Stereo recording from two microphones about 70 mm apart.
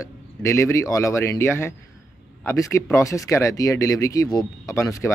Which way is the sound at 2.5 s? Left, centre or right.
Left.